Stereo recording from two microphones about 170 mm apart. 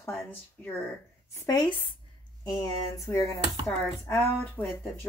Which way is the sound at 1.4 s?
25° left (ahead or behind).